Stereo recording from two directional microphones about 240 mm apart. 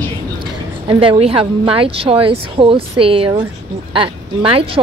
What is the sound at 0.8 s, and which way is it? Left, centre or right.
A woman's voice, right.